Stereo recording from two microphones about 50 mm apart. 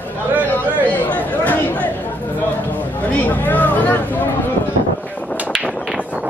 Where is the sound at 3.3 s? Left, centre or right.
Left.